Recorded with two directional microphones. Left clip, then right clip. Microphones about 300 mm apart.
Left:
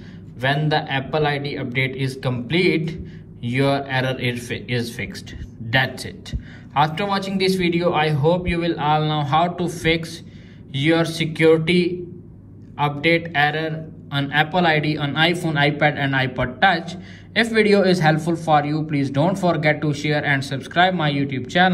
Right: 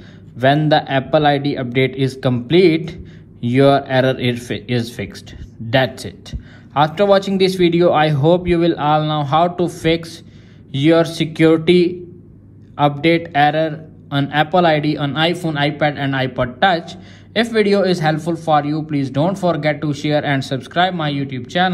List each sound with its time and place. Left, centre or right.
0.4 s a man's voice: right